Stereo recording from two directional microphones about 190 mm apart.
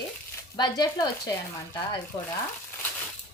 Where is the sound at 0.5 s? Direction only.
20° left (ahead or behind).